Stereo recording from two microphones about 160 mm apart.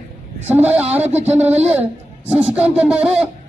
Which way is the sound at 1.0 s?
40° right (ahead or behind).